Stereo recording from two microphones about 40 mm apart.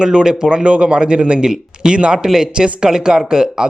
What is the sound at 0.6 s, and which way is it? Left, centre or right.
Speech, right.